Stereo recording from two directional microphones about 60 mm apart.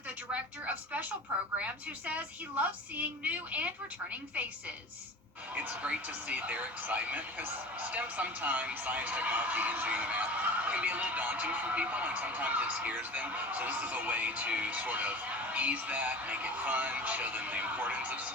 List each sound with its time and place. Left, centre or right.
0.6 s speech: right
5.6 s speech: right